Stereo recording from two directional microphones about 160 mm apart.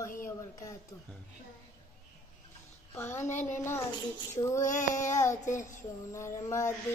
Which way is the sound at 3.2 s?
50° left (ahead or behind).